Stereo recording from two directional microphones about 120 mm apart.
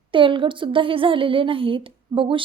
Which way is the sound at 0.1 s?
45° right (ahead or behind).